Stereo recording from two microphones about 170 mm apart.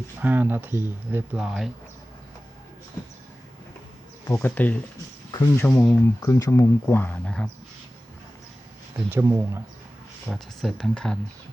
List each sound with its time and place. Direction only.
0.2 s speech: 10° right (ahead or behind)
4.3 s speech: 10° left (ahead or behind)
5.6 s speech: 5° left (ahead or behind)
6.1 s speech: 20° left (ahead or behind)
9.0 s speech: 15° right (ahead or behind)
10.2 s speech: centre (ahead or behind)